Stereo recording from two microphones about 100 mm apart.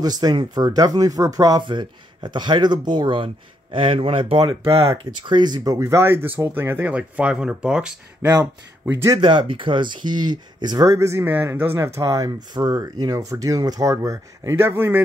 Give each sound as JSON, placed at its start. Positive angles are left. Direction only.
{"t": 0.0, "sound": "speech", "side_deg": -40}
{"t": 1.7, "sound": "speech", "side_deg": -50}
{"t": 5.2, "sound": "speech", "side_deg": -50}
{"t": 9.2, "sound": "speech", "side_deg": -55}
{"t": 10.9, "sound": "speech", "side_deg": -30}
{"t": 12.5, "sound": "speech", "side_deg": -45}
{"t": 14.7, "sound": "speech", "side_deg": -20}